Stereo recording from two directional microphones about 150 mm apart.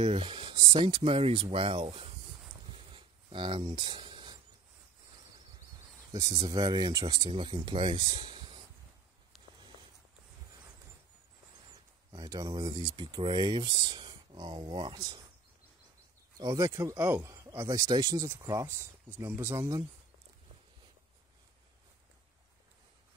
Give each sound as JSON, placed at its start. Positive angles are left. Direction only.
{"t": 0.0, "sound": "speech", "side_deg": -40}
{"t": 2.8, "sound": "a sound", "side_deg": -35}
{"t": 6.4, "sound": "speech", "side_deg": -30}
{"t": 12.1, "sound": "speech", "side_deg": -25}
{"t": 16.3, "sound": "speech", "side_deg": -25}